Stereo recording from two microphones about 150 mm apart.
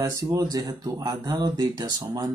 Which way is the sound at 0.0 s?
20° right (ahead or behind).